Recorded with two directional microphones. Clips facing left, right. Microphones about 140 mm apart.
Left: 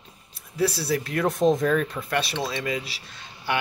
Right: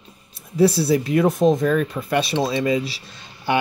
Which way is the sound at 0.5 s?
25° right (ahead or behind).